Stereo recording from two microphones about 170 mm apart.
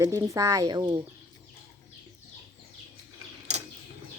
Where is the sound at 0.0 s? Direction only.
20° right (ahead or behind).